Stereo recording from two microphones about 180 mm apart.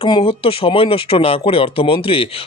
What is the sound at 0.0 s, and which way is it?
Speech, 30° left (ahead or behind).